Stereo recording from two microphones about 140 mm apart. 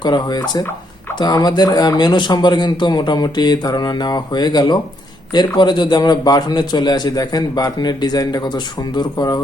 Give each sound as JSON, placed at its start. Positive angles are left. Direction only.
{"t": 0.0, "sound": "a man's voice", "side_deg": 30}